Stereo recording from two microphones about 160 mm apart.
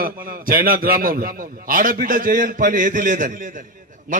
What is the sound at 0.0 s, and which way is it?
A man's voice, 65° right (ahead or behind).